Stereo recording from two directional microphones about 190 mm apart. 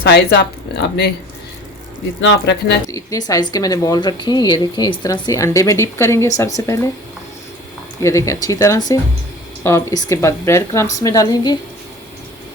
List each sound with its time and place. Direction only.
0.0 s speech: 55° left (ahead or behind)
2.2 s speech: 65° left (ahead or behind)
2.9 s speech: 20° left (ahead or behind)
8.0 s speech: 15° left (ahead or behind)